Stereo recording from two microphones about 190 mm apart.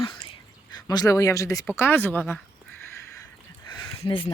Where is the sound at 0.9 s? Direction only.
20° left (ahead or behind).